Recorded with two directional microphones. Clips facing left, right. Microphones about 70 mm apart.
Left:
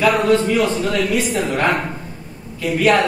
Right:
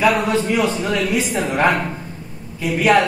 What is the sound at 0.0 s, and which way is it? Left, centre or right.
A man's voice, centre.